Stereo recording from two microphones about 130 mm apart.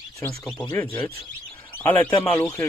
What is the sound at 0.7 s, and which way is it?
A man's voice, 15° left (ahead or behind).